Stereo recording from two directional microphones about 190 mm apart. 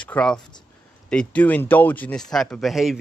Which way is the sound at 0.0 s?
5° left (ahead or behind).